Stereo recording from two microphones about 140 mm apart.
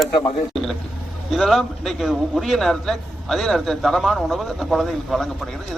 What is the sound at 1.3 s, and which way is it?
A man's voice, centre (ahead or behind).